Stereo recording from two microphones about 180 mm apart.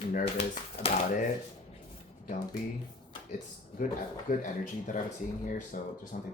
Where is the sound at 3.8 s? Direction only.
50° left (ahead or behind).